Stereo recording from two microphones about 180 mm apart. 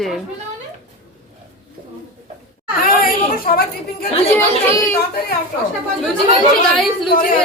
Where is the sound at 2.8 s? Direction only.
55° left (ahead or behind).